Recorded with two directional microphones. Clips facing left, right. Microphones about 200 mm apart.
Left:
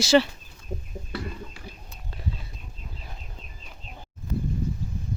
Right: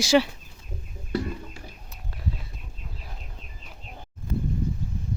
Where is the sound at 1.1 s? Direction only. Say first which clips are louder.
Right 6 dB; 45° right (ahead or behind).